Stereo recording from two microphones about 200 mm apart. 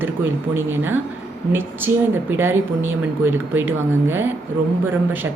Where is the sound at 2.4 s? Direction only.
10° right (ahead or behind).